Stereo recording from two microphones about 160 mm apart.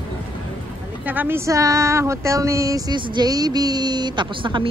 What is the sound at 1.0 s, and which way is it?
Speech, 10° right (ahead or behind).